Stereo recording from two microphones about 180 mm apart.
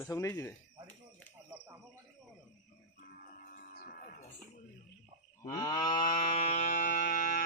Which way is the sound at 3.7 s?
55° left (ahead or behind).